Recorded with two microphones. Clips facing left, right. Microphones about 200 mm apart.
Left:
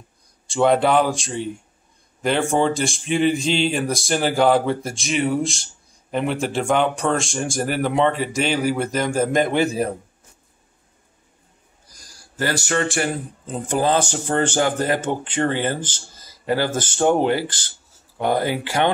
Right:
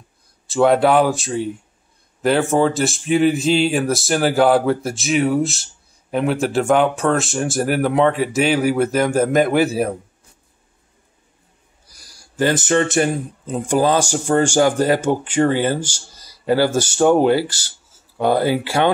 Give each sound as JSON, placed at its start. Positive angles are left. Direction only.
{"t": 0.5, "sound": "speech", "side_deg": -5}
{"t": 12.1, "sound": "speech", "side_deg": -15}
{"t": 17.0, "sound": "speech", "side_deg": 20}
{"t": 18.4, "sound": "speech", "side_deg": -10}